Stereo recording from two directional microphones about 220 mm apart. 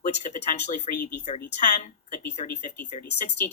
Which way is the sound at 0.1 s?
30° left (ahead or behind).